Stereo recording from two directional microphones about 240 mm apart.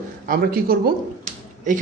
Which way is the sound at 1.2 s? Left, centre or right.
Right.